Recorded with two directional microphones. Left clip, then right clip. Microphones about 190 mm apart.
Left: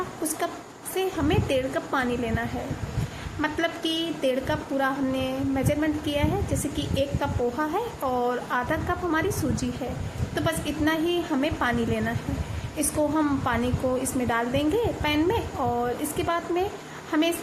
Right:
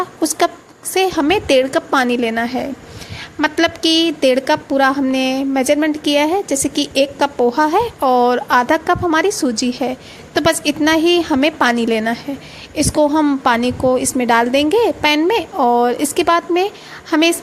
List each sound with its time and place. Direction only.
0.9 s a woman's voice: 55° right (ahead or behind)
12.7 s a woman's voice: 50° right (ahead or behind)